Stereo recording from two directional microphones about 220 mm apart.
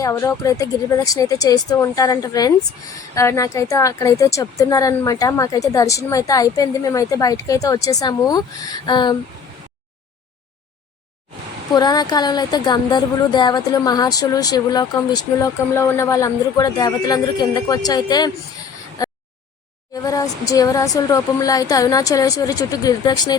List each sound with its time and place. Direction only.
0.0 s speech: 15° left (ahead or behind)
11.7 s speech: 20° left (ahead or behind)
20.0 s speech: 15° left (ahead or behind)